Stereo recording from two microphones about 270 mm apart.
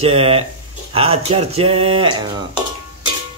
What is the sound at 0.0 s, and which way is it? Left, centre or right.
Speech, right.